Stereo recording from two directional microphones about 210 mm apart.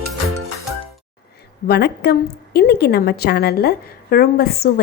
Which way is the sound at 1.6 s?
50° left (ahead or behind).